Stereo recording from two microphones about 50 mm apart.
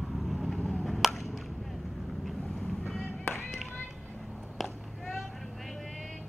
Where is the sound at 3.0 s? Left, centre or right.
Left.